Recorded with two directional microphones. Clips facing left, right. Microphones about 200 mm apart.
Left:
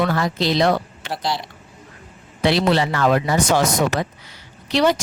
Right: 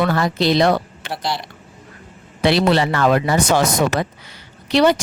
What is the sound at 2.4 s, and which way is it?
A woman's voice, 65° right (ahead or behind).